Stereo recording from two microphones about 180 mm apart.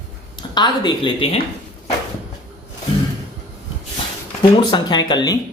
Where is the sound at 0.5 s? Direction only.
25° left (ahead or behind).